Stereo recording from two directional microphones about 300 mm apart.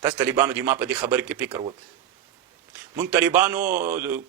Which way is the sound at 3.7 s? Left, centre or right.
Right.